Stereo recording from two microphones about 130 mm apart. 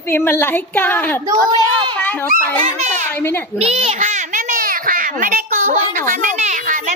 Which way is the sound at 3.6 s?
55° right (ahead or behind).